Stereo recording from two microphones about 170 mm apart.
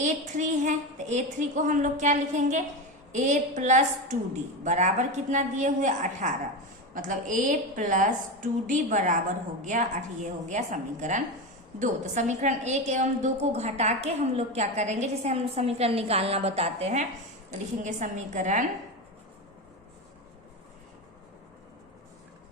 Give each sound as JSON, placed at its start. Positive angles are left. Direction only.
{"t": 0.0, "sound": "a woman's voice", "side_deg": -45}